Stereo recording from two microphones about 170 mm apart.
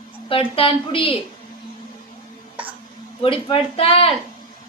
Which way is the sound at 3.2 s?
30° left (ahead or behind).